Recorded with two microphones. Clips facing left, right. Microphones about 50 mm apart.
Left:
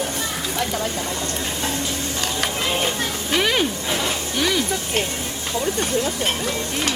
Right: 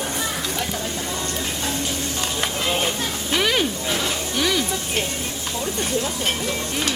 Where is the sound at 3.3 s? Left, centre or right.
Centre.